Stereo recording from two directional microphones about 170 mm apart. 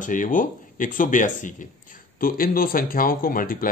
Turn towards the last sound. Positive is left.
turn(degrees=55)  # may be behind; listen again after turning